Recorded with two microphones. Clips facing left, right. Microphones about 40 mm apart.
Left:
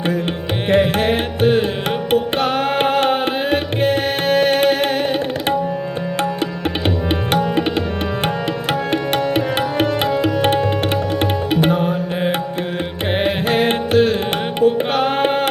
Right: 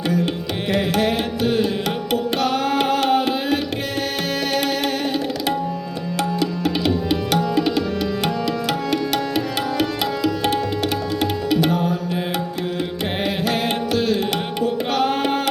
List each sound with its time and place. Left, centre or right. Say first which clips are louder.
0.7 s carnatic music: left 5 dB; left
2.0 s music: left 4 dB; left
6.1 s tabla: right 1 dB; left
8.9 s music: left 5 dB; left
11.2 s tabla: even; left
13.2 s music: left 5 dB; left